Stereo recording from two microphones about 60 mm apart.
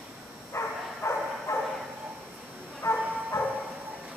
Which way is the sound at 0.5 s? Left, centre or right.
Left.